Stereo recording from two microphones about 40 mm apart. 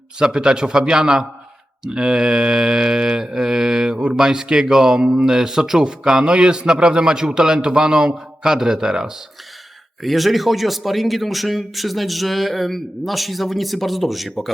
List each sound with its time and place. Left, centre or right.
0.2 s a man's voice: centre
3.9 s speech: right
4.2 s a man's voice: centre
6.2 s a man's voice: right
10.0 s speech: centre